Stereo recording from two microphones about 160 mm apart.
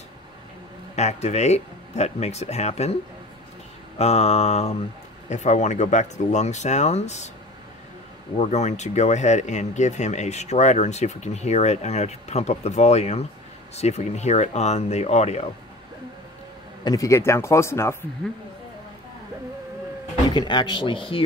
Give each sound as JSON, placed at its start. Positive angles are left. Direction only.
{"t": 0.9, "sound": "speech", "side_deg": 45}
{"t": 4.0, "sound": "mantra", "side_deg": 40}
{"t": 5.3, "sound": "speech", "side_deg": 45}
{"t": 8.4, "sound": "speech", "side_deg": 45}
{"t": 16.8, "sound": "speech", "side_deg": 20}
{"t": 20.2, "sound": "speech", "side_deg": 25}